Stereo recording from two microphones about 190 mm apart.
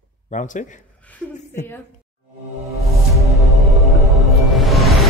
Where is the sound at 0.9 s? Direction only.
5° left (ahead or behind).